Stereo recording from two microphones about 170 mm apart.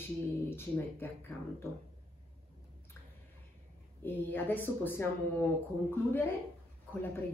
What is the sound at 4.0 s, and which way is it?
Speech, 10° left (ahead or behind).